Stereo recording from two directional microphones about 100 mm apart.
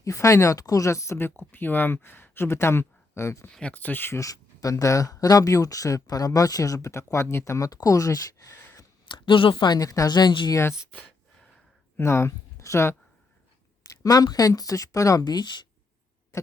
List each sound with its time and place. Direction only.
0.0 s speech: 30° left (ahead or behind)
3.5 s speech: 10° left (ahead or behind)
4.2 s speech: 35° left (ahead or behind)
9.0 s speech: 55° left (ahead or behind)
9.6 s speech: 40° left (ahead or behind)
11.9 s speech: 25° left (ahead or behind); by 15.6 s 45° left (ahead or behind)